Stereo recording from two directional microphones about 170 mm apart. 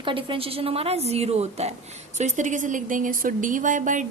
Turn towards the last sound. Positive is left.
turn(degrees=-50)  # may be behind; listen again after turning